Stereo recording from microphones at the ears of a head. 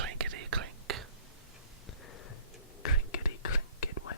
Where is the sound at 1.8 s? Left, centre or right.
Left.